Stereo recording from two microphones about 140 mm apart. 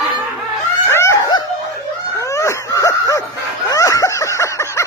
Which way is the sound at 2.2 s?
20° left (ahead or behind).